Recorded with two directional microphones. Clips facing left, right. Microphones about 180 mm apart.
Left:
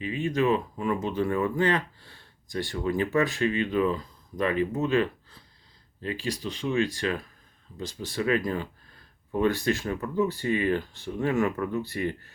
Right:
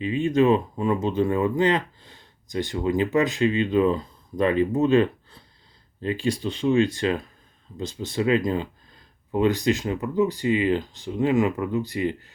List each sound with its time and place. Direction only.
0.0 s speech: 25° right (ahead or behind)